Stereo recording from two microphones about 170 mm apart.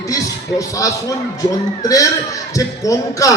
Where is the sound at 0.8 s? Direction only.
20° left (ahead or behind).